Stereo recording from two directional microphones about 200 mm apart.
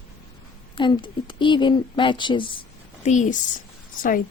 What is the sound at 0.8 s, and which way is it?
A woman's voice, 25° left (ahead or behind).